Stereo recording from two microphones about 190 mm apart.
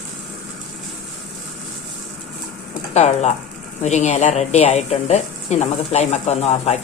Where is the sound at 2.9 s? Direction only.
35° left (ahead or behind).